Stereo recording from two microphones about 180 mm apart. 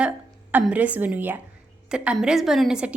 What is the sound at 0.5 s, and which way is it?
A woman's voice, 10° right (ahead or behind).